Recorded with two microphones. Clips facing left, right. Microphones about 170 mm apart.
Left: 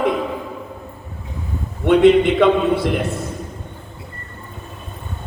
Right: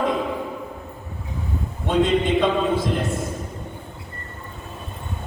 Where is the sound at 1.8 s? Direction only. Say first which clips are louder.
Left 8 dB; 65° left (ahead or behind).